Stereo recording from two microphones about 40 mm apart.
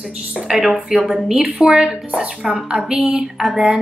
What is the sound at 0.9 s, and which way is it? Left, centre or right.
A woman's voice, centre.